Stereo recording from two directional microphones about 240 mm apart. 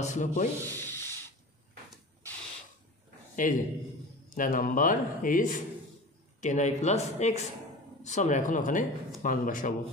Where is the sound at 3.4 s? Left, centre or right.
Left.